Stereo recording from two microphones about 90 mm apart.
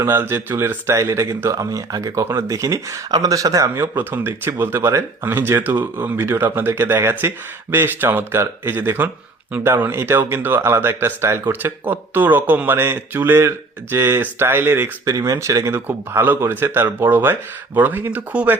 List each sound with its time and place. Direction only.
0.0 s speech: 25° right (ahead or behind)
3.8 s speech: 25° right (ahead or behind)
15.0 s speech: 40° right (ahead or behind); by 18.5 s 20° right (ahead or behind)